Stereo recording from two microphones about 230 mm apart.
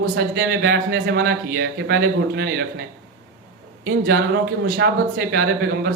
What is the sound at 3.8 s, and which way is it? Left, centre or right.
A man's voice, right.